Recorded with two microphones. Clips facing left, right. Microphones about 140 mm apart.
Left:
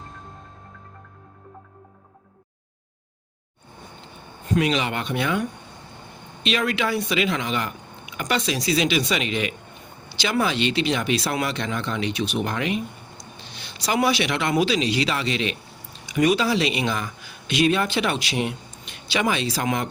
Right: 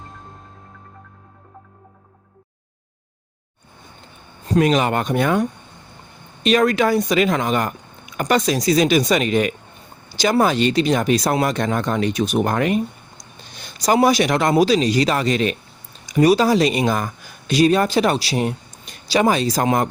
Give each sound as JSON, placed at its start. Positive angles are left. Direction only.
{"t": 4.4, "sound": "speech", "side_deg": -40}